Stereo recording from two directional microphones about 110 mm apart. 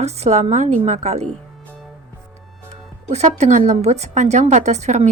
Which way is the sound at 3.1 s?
85° right.